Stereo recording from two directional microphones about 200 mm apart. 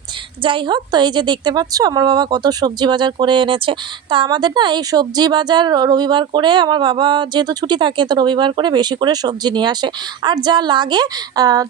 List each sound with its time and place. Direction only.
0.4 s a woman's voice: 25° right (ahead or behind)